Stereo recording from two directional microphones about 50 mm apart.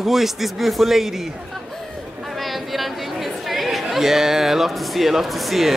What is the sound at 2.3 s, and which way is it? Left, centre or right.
Speech, centre.